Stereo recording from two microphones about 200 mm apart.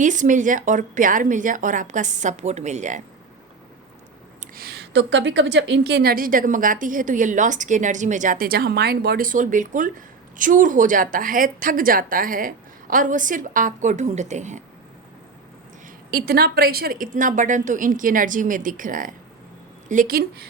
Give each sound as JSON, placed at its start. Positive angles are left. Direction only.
{"t": 0.0, "sound": "a woman's voice", "side_deg": -40}
{"t": 4.4, "sound": "a woman's voice", "side_deg": -50}
{"t": 16.1, "sound": "a woman's voice", "side_deg": -50}